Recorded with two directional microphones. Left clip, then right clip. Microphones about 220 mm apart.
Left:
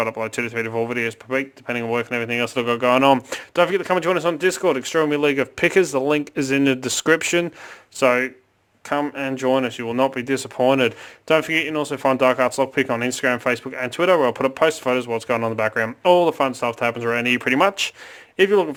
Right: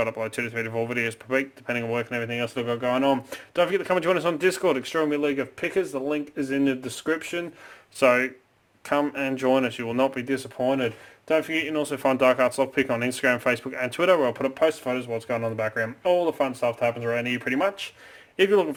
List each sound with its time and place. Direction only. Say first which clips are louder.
0.0 s speech: left 4 dB; 25° left (ahead or behind); by 7.4 s 40° left (ahead or behind)
7.9 s speech: left 2 dB; 20° left (ahead or behind)
10.7 s speech: left 7 dB; 45° left (ahead or behind)
16.4 s speech: left 3 dB; 45° left (ahead or behind)
18.3 s speech: left 4 dB; 20° left (ahead or behind)